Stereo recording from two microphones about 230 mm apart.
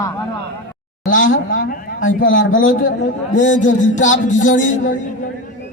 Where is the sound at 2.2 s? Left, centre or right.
Left.